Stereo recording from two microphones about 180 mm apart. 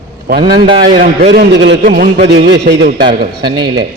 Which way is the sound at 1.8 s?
50° right (ahead or behind).